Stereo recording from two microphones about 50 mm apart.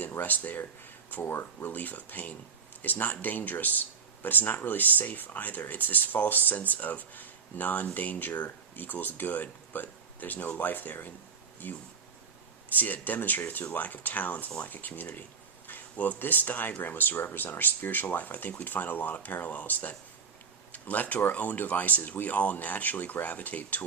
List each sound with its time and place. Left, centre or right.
0.0 s speech: left
1.2 s speech: left
1.7 s speech: left
15.6 s a sound: left
16.1 s speech: left